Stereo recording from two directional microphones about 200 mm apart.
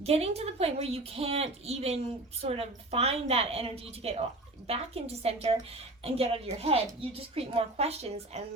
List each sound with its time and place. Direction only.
0.0 s a woman's voice: 30° right (ahead or behind)